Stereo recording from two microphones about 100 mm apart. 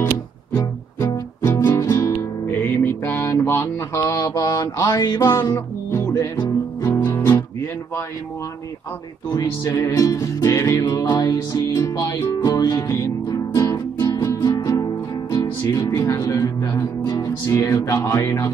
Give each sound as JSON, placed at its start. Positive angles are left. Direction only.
{"t": 0.6, "sound": "music", "side_deg": 25}
{"t": 2.4, "sound": "mantra", "side_deg": 25}
{"t": 5.2, "sound": "speech", "side_deg": 30}
{"t": 7.0, "sound": "guitar", "side_deg": 20}
{"t": 9.3, "sound": "music", "side_deg": 35}